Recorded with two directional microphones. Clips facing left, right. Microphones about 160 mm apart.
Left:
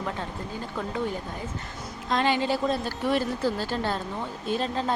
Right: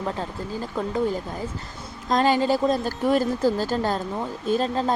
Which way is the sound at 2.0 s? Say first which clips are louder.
Right 4 dB; 40° right (ahead or behind).